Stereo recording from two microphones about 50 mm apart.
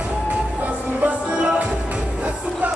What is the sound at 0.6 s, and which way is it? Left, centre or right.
Music, right.